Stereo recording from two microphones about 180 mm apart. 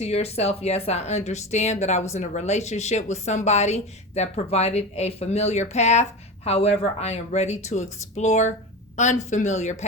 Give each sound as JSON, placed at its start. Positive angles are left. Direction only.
{"t": 0.0, "sound": "speech", "side_deg": 35}